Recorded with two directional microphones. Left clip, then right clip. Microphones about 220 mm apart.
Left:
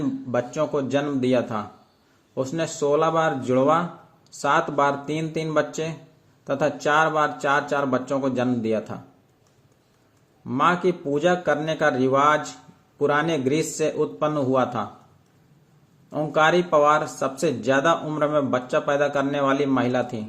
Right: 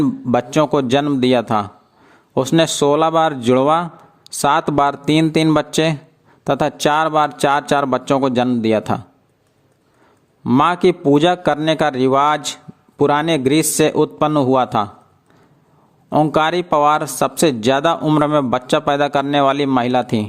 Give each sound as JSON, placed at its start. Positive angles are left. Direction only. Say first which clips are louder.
{"t": 0.0, "sound": "speech", "louder": "right 8 dB", "side_deg": -50}
{"t": 10.4, "sound": "speech", "louder": "right 7 dB", "side_deg": -50}
{"t": 16.0, "sound": "speech", "louder": "right 5 dB", "side_deg": -50}